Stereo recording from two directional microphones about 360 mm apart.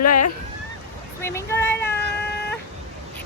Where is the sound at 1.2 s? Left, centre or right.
Centre.